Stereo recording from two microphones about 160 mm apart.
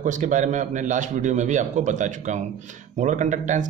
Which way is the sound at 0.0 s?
50° right (ahead or behind).